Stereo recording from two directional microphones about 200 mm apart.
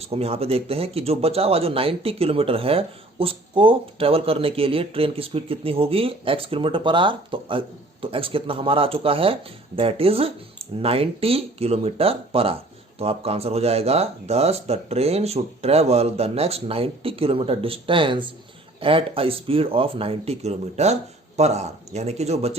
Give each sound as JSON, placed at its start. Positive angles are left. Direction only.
{"t": 0.0, "sound": "speech", "side_deg": -30}